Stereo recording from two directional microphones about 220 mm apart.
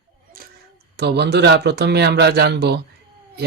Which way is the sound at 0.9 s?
50° right (ahead or behind).